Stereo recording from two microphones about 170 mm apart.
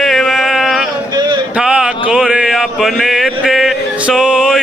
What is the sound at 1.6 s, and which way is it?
Mantra, 5° right (ahead or behind).